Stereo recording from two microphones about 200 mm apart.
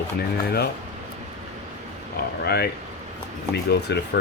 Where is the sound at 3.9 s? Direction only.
60° left (ahead or behind).